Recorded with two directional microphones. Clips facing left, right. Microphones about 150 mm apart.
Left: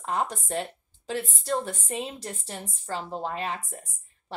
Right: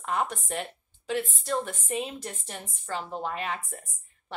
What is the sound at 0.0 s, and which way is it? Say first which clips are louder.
A woman's voice: left 1 dB; 35° left (ahead or behind).